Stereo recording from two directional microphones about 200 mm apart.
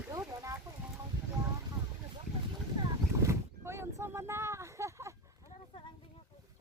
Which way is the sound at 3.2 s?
15° right (ahead or behind).